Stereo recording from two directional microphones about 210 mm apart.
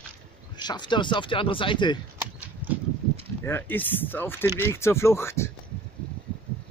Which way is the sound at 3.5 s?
10° left (ahead or behind).